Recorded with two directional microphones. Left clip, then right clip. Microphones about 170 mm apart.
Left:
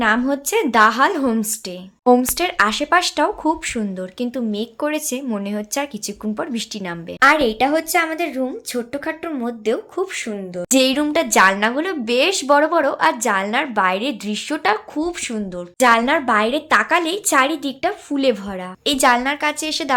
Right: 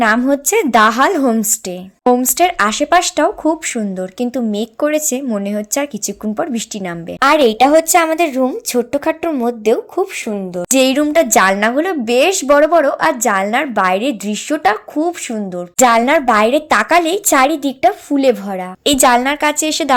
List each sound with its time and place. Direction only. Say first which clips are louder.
0.0 s a woman's voice: right 5 dB; 35° right (ahead or behind)
7.2 s a woman's voice: right 4 dB; 45° right (ahead or behind); by 15.6 s 20° right (ahead or behind)
15.8 s a woman's voice: right 4 dB; 40° right (ahead or behind)